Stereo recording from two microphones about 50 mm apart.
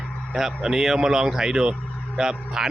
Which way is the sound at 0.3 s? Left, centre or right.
Centre.